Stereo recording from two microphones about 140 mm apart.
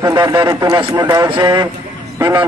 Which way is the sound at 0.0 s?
25° right (ahead or behind).